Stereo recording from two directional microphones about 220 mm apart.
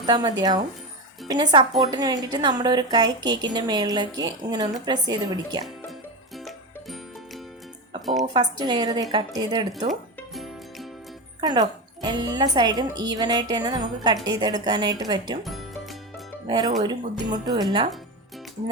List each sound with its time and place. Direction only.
0.0 s speech: 20° right (ahead or behind)
6.3 s music: centre (ahead or behind)
8.2 s speech: 20° right (ahead or behind)
9.9 s music: centre (ahead or behind)
11.3 s speech: 20° right (ahead or behind)
15.4 s music: centre (ahead or behind)
16.5 s speech: 20° right (ahead or behind)